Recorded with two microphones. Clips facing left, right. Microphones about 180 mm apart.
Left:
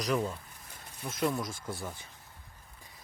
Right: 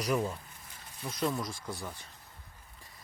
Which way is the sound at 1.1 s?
5° left (ahead or behind).